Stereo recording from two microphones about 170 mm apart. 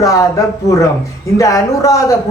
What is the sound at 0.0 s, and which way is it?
A man's voice, 20° left (ahead or behind).